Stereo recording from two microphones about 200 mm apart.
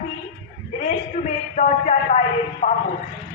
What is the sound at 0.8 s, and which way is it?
A man's voice, 35° left (ahead or behind).